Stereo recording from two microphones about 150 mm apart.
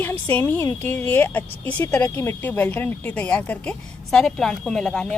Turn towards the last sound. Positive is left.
turn(degrees=5)  # may be behind; listen again after turning